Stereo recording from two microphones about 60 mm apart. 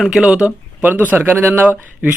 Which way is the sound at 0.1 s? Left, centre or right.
Centre.